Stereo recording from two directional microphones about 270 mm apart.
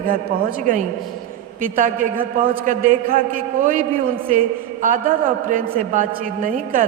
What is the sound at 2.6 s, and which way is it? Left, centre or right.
A woman's voice, right.